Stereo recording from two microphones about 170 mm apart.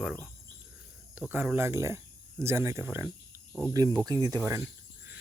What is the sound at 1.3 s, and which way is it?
Speech, 10° right (ahead or behind).